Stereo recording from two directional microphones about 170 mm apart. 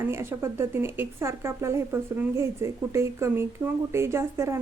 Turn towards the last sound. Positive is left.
turn(degrees=-15)  # may be behind; listen again after turning